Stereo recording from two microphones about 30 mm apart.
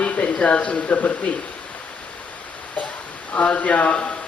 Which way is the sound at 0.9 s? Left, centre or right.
Left.